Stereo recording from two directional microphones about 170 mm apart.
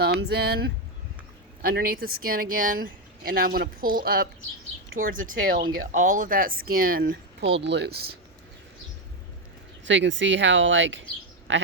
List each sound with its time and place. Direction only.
0.0 s speech: 70° right (ahead or behind)
7.6 s speech: 90° right
9.8 s speech: 90° right
11.5 s a sound: 90° right